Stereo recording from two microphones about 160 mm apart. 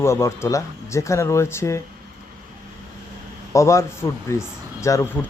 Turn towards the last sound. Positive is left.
turn(degrees=20)  # may be behind; listen again after turning